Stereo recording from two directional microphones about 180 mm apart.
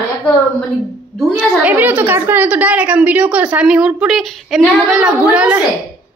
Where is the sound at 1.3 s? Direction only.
10° right (ahead or behind).